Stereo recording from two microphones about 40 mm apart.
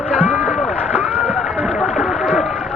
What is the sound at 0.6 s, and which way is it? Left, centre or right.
Rowboat, left.